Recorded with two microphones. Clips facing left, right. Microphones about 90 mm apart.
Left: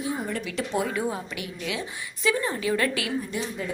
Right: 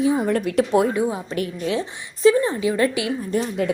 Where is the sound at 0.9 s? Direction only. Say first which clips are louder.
Right 6 dB; 20° right (ahead or behind).